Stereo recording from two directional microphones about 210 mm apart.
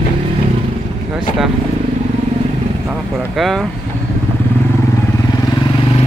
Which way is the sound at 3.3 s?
Centre (ahead or behind).